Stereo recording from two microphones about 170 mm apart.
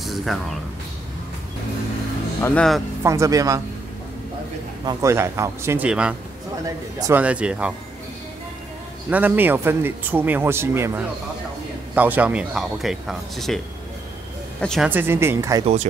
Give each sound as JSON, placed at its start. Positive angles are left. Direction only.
{"t": 0.0, "sound": "a sound", "side_deg": 0}
{"t": 2.4, "sound": "speech", "side_deg": 5}
{"t": 3.0, "sound": "speech", "side_deg": -15}
{"t": 4.8, "sound": "speech", "side_deg": -15}
{"t": 9.1, "sound": "speech", "side_deg": -10}
{"t": 14.6, "sound": "speech", "side_deg": 0}
{"t": 14.9, "sound": "speech", "side_deg": -15}
{"t": 15.6, "sound": "speech", "side_deg": -40}